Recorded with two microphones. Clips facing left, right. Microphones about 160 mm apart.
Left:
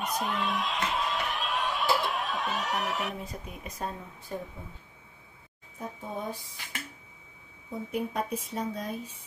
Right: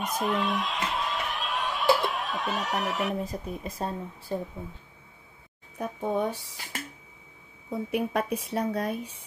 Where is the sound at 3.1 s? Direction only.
35° right (ahead or behind).